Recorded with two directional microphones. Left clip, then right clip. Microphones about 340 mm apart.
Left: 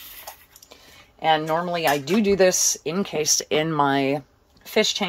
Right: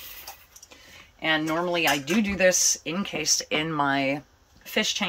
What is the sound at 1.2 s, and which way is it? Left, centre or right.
Speech, centre.